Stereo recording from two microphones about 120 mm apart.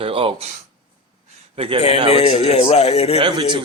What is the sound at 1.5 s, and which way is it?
Speech, 50° right (ahead or behind).